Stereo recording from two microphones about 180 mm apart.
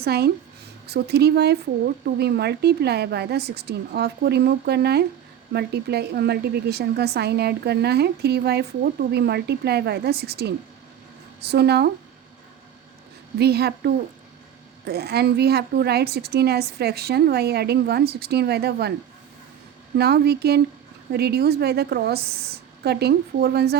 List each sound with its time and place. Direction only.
0.0 s a woman's voice: 60° right (ahead or behind)
13.4 s a woman's voice: 65° right (ahead or behind)
20.0 s a woman's voice: 65° right (ahead or behind)